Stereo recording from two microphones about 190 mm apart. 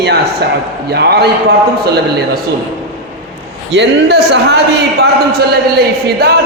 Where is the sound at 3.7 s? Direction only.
65° right (ahead or behind).